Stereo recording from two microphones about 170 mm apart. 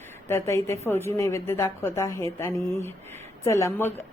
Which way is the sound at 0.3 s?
15° left (ahead or behind).